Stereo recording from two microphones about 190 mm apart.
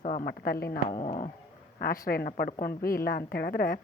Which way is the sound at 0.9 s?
35° left (ahead or behind).